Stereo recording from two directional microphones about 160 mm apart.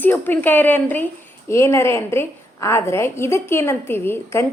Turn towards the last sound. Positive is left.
turn(degrees=15)  # may be behind; listen again after turning